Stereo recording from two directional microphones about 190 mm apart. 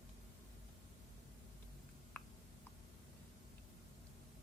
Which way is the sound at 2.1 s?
10° left (ahead or behind).